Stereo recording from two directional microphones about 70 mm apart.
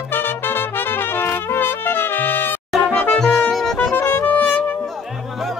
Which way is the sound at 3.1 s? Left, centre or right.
Centre.